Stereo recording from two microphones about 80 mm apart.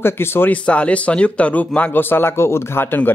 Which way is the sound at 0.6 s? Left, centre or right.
Centre.